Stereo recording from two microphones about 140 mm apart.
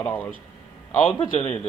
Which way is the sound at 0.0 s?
10° left (ahead or behind).